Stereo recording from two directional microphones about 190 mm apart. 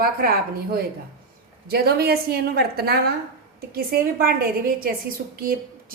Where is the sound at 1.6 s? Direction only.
55° right (ahead or behind).